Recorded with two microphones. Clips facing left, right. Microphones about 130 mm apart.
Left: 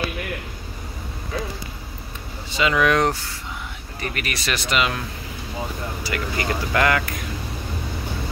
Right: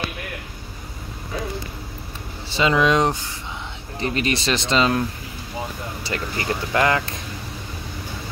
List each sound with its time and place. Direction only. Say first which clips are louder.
2.5 s speech: right 1 dB; 30° right (ahead or behind)
6.0 s speech: even; 25° right (ahead or behind)